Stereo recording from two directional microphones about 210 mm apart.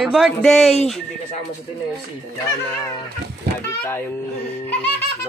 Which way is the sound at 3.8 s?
5° left (ahead or behind).